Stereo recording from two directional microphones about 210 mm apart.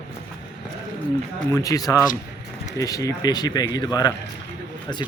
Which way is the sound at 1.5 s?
15° left (ahead or behind).